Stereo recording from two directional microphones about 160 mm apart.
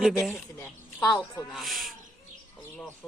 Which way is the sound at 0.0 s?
Centre (ahead or behind).